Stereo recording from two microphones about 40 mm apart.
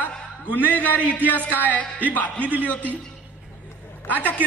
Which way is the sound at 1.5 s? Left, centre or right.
Left.